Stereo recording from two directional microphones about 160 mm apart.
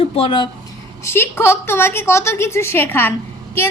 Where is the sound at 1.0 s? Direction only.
15° left (ahead or behind).